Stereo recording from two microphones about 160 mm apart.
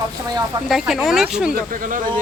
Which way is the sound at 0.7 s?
Centre (ahead or behind).